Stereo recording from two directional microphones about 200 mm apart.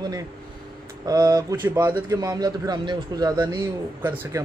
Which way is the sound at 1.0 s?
20° right (ahead or behind).